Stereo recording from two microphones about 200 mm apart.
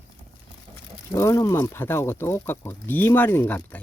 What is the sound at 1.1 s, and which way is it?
Speech, 15° left (ahead or behind).